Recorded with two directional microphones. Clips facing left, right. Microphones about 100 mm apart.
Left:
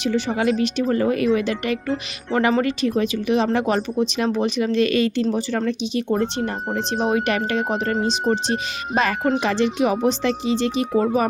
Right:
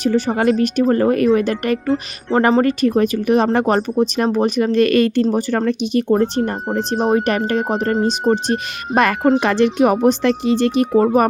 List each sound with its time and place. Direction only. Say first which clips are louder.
0.0 s speech: right 5 dB; 45° right (ahead or behind)